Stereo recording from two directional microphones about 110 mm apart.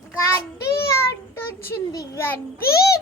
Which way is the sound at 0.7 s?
25° left (ahead or behind).